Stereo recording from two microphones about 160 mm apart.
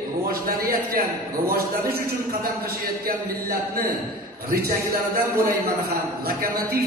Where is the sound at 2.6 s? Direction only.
70° right (ahead or behind).